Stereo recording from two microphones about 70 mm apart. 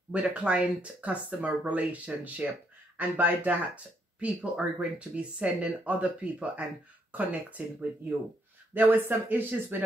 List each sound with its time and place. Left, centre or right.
0.1 s speech: centre